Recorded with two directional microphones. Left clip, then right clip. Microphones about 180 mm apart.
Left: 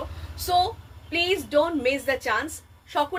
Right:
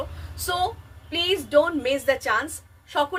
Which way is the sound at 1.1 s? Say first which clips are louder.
Right 2 dB; 15° right (ahead or behind).